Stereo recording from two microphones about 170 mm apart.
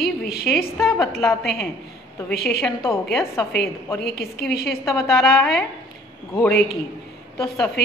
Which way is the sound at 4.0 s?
65° left (ahead or behind).